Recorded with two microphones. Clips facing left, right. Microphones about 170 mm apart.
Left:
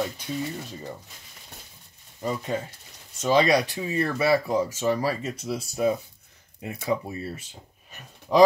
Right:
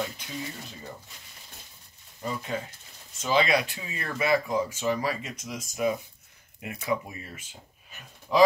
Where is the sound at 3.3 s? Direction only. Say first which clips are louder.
Left 4 dB; 40° left (ahead or behind).